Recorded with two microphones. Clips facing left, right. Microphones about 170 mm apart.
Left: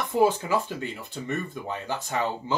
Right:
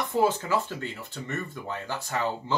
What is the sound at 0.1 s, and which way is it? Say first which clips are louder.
Speech: left 3 dB; 15° left (ahead or behind).